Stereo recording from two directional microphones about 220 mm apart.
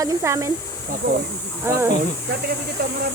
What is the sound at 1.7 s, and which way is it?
Speech, 10° right (ahead or behind).